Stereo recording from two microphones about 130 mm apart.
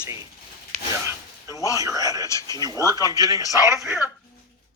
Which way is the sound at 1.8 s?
25° right (ahead or behind).